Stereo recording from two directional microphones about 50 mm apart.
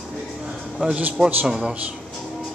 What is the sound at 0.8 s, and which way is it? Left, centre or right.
Speech, centre.